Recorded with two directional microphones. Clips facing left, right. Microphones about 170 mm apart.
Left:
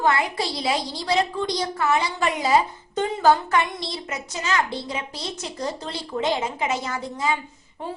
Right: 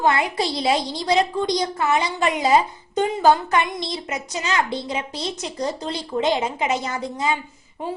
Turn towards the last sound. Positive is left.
turn(degrees=-20)  # may be behind; listen again after turning